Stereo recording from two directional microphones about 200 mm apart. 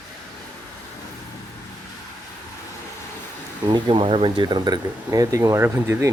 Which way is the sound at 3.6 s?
25° right (ahead or behind).